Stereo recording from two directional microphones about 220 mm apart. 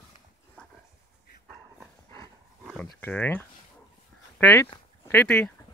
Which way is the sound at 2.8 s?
5° left (ahead or behind).